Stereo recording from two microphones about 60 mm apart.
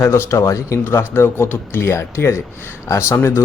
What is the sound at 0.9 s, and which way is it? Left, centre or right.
Speech, left.